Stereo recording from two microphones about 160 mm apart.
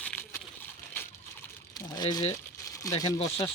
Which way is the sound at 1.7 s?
25° left (ahead or behind).